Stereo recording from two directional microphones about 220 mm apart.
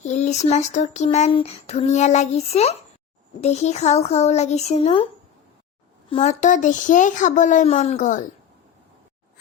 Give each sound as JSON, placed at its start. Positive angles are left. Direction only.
{"t": 0.0, "sound": "speech", "side_deg": 30}
{"t": 6.1, "sound": "speech", "side_deg": 30}